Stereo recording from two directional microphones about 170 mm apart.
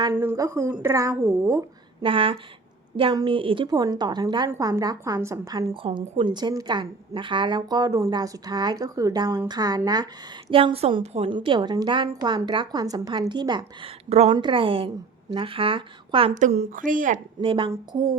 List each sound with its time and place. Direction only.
0.1 s speech: 10° right (ahead or behind)
2.0 s a woman's voice: 30° right (ahead or behind)
4.4 s a woman's voice: 15° right (ahead or behind); by 16.3 s 30° right (ahead or behind)
16.3 s speech: 45° right (ahead or behind)
17.4 s a woman's voice: 30° right (ahead or behind)